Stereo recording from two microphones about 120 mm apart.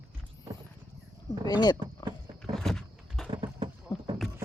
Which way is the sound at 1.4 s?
35° left (ahead or behind).